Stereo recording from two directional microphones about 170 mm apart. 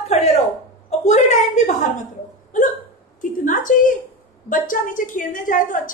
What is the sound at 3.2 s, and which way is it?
A woman's voice, 50° left (ahead or behind).